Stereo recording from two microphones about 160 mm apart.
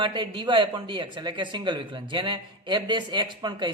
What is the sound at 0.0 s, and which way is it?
A man's voice, 30° right (ahead or behind).